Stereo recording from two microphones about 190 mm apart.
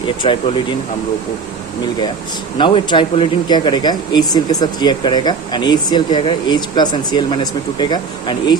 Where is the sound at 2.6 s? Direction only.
25° left (ahead or behind).